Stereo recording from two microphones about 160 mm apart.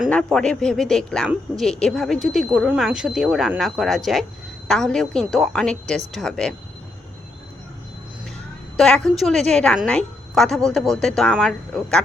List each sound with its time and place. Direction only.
0.1 s speech: 5° left (ahead or behind)
8.7 s a woman's voice: 5° left (ahead or behind)